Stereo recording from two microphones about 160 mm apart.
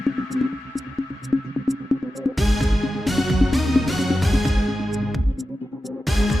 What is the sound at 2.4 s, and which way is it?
Music, centre (ahead or behind).